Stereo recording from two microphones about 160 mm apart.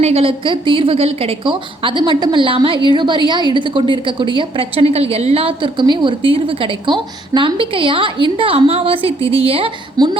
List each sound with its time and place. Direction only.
0.0 s a woman's voice: 40° right (ahead or behind)